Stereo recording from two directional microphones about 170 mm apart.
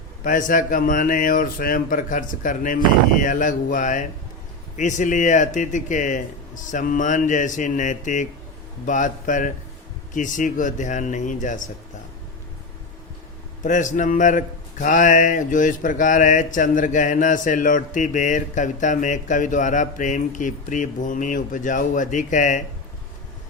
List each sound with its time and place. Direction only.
0.3 s a man's voice: 50° left (ahead or behind)
13.6 s a man's voice: 45° left (ahead or behind)